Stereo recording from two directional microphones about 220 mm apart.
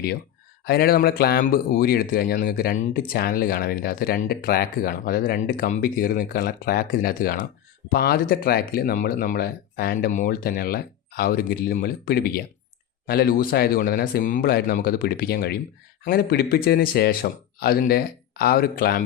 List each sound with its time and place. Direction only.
0.6 s speech: 45° left (ahead or behind)